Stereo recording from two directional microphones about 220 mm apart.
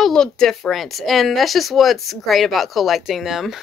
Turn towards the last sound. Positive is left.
turn(degrees=0)  # may be behind; listen again after turning